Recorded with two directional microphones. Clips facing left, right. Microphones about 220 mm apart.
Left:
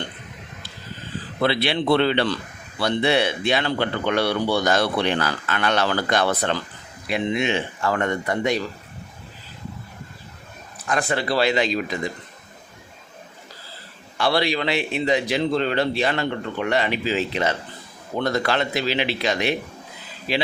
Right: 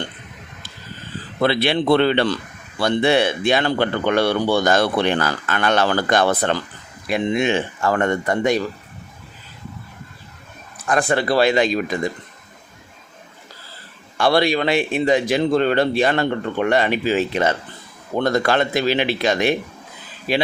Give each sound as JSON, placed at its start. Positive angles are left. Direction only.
{"t": 1.4, "sound": "speech", "side_deg": -50}
{"t": 10.8, "sound": "speech", "side_deg": -50}
{"t": 14.2, "sound": "speech", "side_deg": -50}